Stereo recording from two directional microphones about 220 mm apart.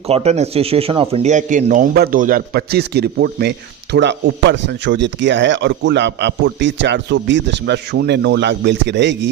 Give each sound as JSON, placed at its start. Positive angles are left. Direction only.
{"t": 0.1, "sound": "speech", "side_deg": -30}